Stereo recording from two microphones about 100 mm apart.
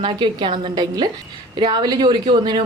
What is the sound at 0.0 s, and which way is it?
Speech, 50° right (ahead or behind).